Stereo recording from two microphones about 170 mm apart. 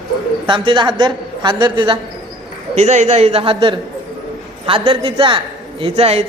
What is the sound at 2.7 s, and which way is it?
A man's voice, 40° right (ahead or behind).